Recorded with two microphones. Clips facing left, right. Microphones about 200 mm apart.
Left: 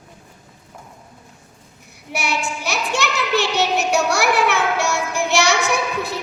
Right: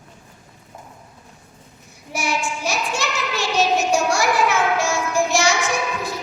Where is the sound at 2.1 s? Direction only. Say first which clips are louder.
Even; 65° left (ahead or behind).